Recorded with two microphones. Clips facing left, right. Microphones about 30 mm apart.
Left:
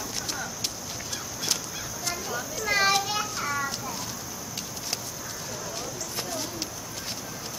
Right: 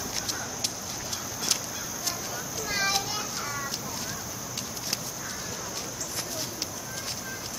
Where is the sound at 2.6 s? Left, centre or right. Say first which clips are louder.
Left 5 dB; left.